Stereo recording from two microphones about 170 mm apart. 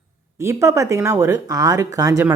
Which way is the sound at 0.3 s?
15° right (ahead or behind).